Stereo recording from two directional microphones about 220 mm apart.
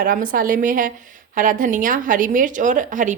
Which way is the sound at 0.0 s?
40° right (ahead or behind).